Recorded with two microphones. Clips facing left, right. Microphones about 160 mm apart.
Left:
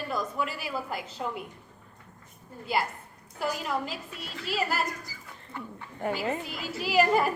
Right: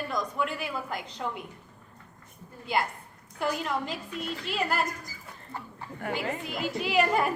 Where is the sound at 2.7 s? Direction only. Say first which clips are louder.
Even; 5° left (ahead or behind).